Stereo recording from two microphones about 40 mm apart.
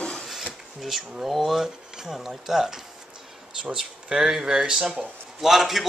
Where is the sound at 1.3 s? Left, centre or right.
Centre.